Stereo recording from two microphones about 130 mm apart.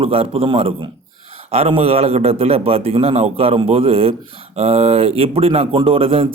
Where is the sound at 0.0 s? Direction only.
45° right (ahead or behind).